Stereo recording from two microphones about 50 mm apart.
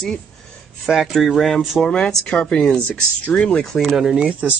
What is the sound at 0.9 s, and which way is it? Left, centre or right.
Speech, centre.